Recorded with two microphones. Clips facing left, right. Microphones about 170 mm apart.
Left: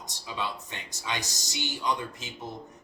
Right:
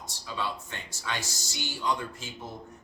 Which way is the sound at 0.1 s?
15° left (ahead or behind).